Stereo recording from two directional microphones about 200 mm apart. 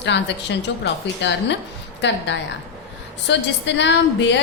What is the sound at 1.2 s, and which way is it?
A woman's voice, 60° left (ahead or behind).